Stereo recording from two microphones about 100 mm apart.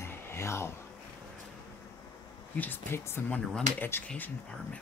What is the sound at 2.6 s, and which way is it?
Speech, 20° left (ahead or behind).